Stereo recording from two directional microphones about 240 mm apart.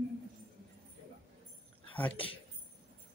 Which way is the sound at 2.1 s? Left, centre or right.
Left.